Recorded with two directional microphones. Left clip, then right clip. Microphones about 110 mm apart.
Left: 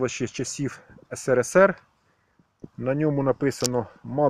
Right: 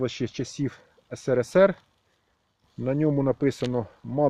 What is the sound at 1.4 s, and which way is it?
Speech, 15° right (ahead or behind).